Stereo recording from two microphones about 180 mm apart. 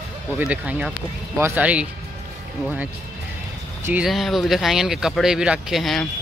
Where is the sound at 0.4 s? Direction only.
5° right (ahead or behind).